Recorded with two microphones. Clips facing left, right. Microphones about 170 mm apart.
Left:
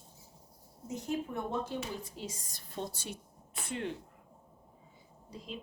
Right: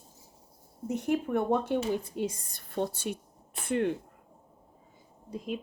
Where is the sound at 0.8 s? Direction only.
65° right (ahead or behind).